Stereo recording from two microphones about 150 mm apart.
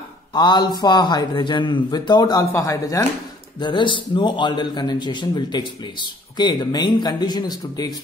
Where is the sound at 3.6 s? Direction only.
30° left (ahead or behind).